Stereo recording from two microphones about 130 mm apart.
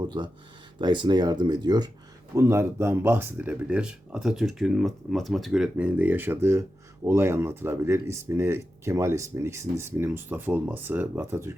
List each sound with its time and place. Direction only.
0.8 s speech: 35° right (ahead or behind)
2.3 s speech: 20° right (ahead or behind)